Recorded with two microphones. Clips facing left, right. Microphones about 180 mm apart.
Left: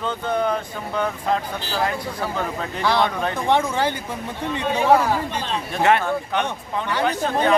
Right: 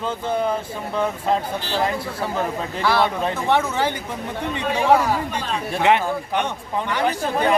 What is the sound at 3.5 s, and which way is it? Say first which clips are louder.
Speech: left 1 dB; 10° left (ahead or behind).